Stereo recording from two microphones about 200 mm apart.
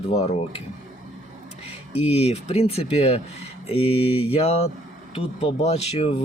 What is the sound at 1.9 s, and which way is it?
Speech, 30° left (ahead or behind).